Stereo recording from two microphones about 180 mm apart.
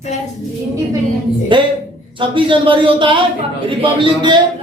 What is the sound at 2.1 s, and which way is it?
Speech, 30° right (ahead or behind).